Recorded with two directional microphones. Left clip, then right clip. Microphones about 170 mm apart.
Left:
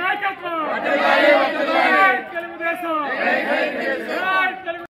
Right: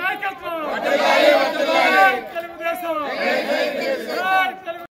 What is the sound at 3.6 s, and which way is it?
Speech, 50° right (ahead or behind).